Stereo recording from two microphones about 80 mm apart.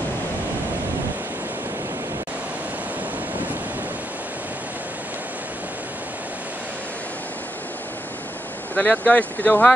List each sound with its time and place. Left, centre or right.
8.7 s speech: centre